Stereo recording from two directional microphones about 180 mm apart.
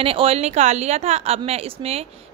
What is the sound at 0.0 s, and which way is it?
A woman's voice, 30° right (ahead or behind).